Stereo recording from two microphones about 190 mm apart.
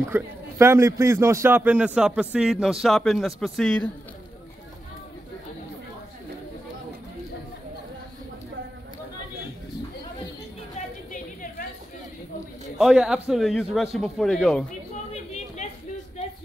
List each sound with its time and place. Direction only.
0.1 s a man's voice: 15° right (ahead or behind); by 3.9 s 5° left (ahead or behind)
12.7 s a man's voice: centre (ahead or behind)
15.3 s a sound: 40° left (ahead or behind)